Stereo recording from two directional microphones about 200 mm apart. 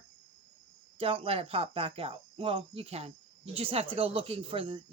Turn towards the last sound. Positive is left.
turn(degrees=-25)  # may be behind; listen again after turning